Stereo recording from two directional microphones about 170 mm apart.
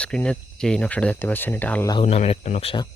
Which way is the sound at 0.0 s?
5° left (ahead or behind).